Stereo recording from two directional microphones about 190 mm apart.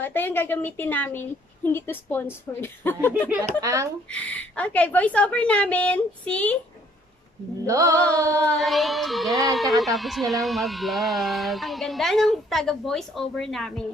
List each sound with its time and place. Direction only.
0.0 s a woman's voice: 10° left (ahead or behind)
3.6 s music: 15° right (ahead or behind)
4.1 s a woman's voice: 5° left (ahead or behind)
7.6 s music: 15° right (ahead or behind)
8.5 s speech: centre (ahead or behind)